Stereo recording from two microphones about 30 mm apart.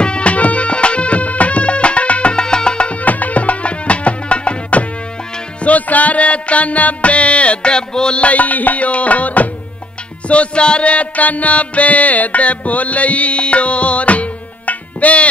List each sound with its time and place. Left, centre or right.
0.0 s music: left
2.3 s music: left
2.9 s music: left
5.6 s music: left
7.7 s music: left
8.2 s music: left
10.2 s music: left
10.9 s music: left